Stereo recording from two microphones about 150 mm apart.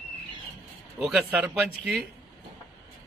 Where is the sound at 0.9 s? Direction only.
Centre (ahead or behind).